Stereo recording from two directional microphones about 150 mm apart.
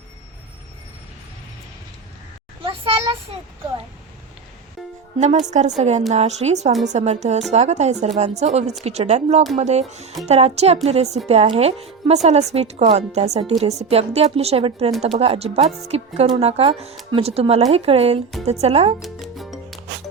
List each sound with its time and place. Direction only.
2.6 s a sound: 35° right (ahead or behind)
5.2 s a woman's voice: 50° right (ahead or behind)
18.9 s music: centre (ahead or behind)